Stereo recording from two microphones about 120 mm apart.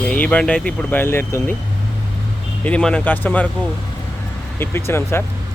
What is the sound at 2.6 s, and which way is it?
Speech, 10° left (ahead or behind).